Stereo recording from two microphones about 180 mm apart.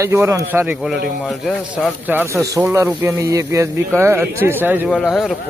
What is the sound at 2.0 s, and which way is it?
Speech, 10° right (ahead or behind).